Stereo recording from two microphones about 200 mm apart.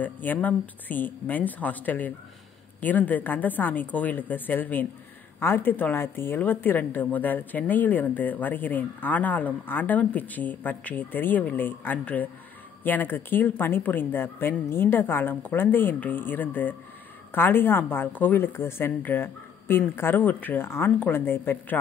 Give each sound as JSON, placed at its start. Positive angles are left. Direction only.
{"t": 0.0, "sound": "speech", "side_deg": 10}